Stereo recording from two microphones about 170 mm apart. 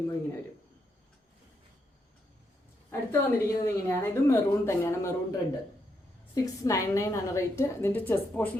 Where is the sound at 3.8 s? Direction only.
15° left (ahead or behind).